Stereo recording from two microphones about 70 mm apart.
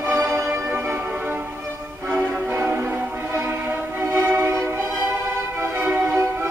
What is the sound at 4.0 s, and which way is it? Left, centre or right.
Music, right.